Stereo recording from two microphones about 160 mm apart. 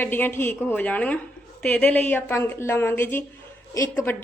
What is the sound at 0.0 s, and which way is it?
Speech, 10° left (ahead or behind).